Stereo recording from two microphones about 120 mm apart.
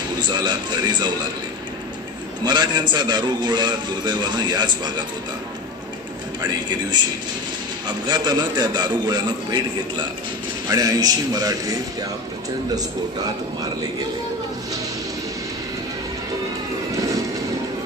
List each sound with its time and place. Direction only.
0.2 s a man's voice: 40° right (ahead or behind)
2.4 s a man's voice: 40° right (ahead or behind)
6.9 s a man's voice: 35° right (ahead or behind)
10.7 s a man's voice: 30° right (ahead or behind)